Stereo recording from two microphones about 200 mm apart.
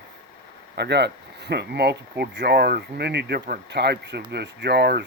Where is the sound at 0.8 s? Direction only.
55° right (ahead or behind).